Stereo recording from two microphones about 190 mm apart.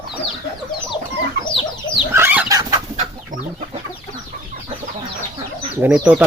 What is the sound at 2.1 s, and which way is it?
Chicken, 10° right (ahead or behind).